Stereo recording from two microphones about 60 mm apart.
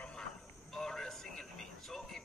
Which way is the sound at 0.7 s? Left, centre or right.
Centre.